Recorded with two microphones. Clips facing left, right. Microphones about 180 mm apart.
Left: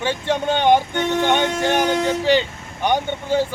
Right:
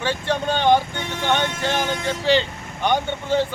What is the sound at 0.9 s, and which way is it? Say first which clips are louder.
Speech: left 8 dB; 55° left (ahead or behind).